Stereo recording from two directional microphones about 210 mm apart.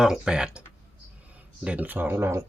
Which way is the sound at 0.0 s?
5° right (ahead or behind).